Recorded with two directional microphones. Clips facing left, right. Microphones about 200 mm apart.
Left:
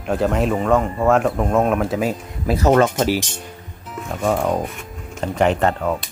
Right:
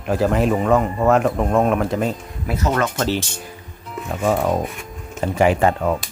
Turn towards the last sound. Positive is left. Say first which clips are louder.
# right 1 dB
turn(degrees=0)  # may be behind; listen again after turning